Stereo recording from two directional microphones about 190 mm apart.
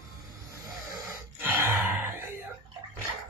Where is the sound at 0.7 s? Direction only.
Centre (ahead or behind).